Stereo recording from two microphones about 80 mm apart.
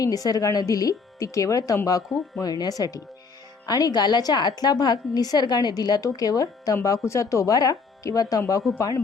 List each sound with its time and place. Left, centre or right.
0.0 s a woman's voice: left